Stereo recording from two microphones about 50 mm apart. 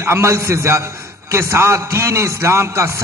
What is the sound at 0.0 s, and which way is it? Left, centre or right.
A man's voice, right.